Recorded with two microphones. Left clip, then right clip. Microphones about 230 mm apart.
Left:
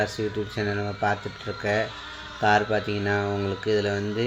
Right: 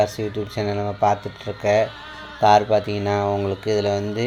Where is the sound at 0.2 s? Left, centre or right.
Right.